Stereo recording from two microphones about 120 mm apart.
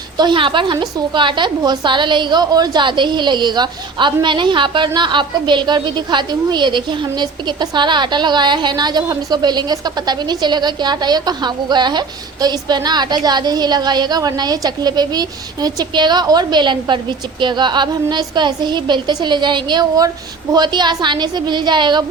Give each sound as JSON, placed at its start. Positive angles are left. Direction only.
{"t": 0.2, "sound": "a woman's voice", "side_deg": -40}